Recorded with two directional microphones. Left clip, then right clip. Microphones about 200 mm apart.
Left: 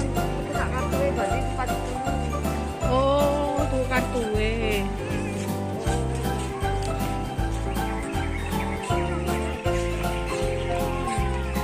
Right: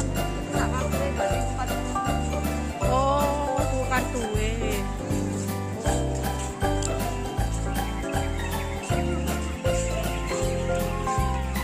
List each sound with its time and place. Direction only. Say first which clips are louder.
2.9 s music: left 1 dB; 15° right (ahead or behind)
3.9 s music: left 2 dB; centre (ahead or behind)